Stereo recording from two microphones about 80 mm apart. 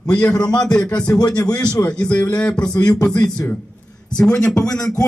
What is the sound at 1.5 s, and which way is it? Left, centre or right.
Speech, left.